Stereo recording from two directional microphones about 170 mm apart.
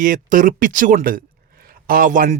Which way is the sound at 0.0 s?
55° right (ahead or behind).